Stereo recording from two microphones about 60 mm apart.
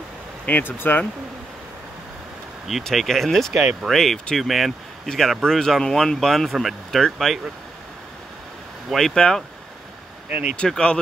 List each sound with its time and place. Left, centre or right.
0.5 s speech: left
2.9 s speech: centre
8.9 s speech: centre
10.5 s speech: centre